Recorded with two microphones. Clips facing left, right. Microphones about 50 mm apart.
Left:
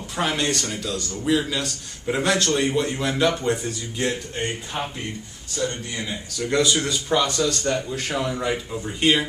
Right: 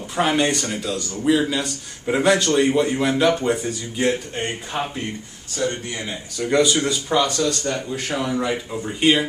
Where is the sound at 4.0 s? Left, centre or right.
Centre.